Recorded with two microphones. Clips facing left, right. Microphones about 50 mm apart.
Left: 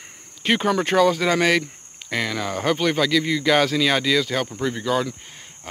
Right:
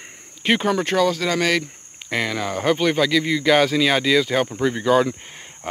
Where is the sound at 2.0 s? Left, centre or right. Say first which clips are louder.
Right 1 dB; centre.